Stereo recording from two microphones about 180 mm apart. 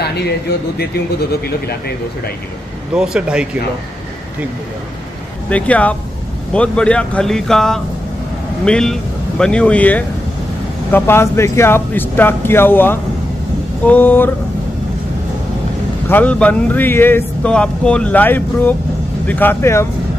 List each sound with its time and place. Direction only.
0.0 s speech: 65° left (ahead or behind)
2.9 s speech: 5° right (ahead or behind)
5.5 s speech: 10° left (ahead or behind)
16.1 s speech: 10° left (ahead or behind)